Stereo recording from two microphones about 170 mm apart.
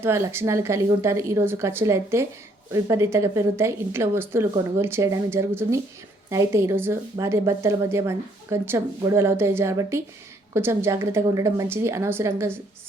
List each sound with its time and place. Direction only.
0.0 s a woman's voice: 15° right (ahead or behind)